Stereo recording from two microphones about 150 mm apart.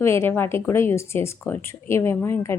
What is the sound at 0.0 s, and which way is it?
A woman's voice, 15° left (ahead or behind).